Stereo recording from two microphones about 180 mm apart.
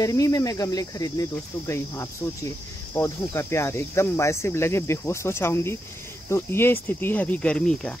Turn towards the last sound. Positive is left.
turn(degrees=5)  # may be behind; listen again after turning